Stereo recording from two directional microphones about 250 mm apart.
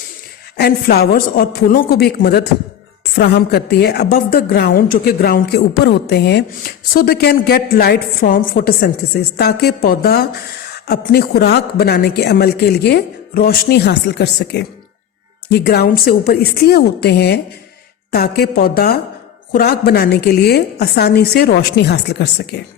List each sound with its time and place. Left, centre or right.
0.5 s a woman's voice: left